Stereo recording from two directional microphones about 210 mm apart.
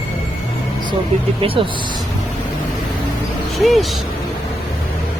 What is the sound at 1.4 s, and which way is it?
Speech, 25° right (ahead or behind).